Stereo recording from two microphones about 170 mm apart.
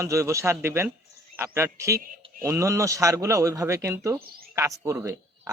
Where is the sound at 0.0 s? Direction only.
15° right (ahead or behind).